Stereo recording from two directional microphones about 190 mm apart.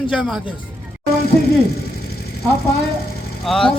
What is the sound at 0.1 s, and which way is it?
Speech, centre (ahead or behind).